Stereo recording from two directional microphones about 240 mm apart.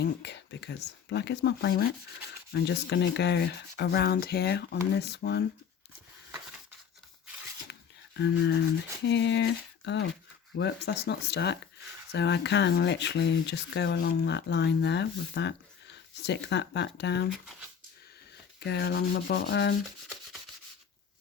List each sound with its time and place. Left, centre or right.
0.0 s speech: left
7.7 s a sound: left
9.0 s speech: left
18.6 s speech: left